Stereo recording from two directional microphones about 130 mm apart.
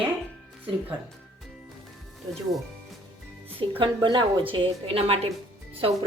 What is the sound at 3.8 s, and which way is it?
A woman's voice, 40° right (ahead or behind).